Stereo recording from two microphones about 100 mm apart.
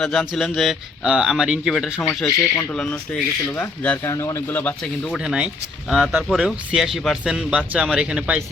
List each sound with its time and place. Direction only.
0.0 s speech: 5° left (ahead or behind)
2.0 s speech: 20° left (ahead or behind)
4.8 s speech: 5° left (ahead or behind)
5.2 s speech: 10° right (ahead or behind)